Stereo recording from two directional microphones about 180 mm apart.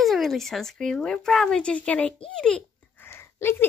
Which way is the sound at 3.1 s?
15° left (ahead or behind).